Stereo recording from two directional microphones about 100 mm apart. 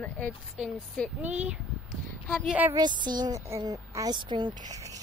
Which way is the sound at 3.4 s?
35° right (ahead or behind).